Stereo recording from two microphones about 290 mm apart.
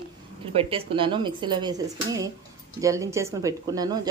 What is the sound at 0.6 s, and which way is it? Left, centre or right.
Speech, centre.